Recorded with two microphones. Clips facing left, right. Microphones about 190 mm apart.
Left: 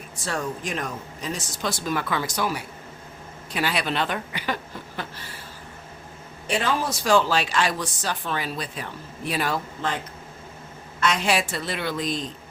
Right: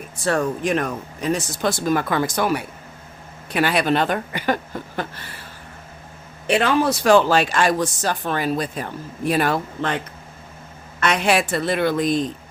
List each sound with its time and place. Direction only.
0.3 s speech: 60° right (ahead or behind)
6.5 s speech: 65° right (ahead or behind)
11.0 s speech: 60° right (ahead or behind)